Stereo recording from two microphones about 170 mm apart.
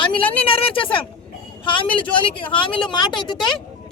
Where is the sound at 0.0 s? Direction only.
30° left (ahead or behind).